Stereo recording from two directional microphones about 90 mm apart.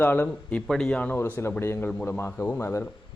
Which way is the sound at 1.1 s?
20° left (ahead or behind).